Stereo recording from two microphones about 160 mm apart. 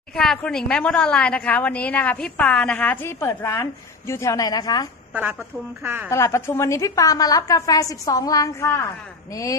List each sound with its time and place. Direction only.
0.1 s a woman's voice: 5° left (ahead or behind); by 4.9 s 25° left (ahead or behind)
5.1 s a woman's voice: 10° right (ahead or behind)
6.1 s a woman's voice: 15° left (ahead or behind)